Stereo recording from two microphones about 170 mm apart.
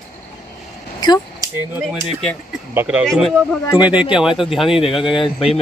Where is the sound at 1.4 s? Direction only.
20° right (ahead or behind).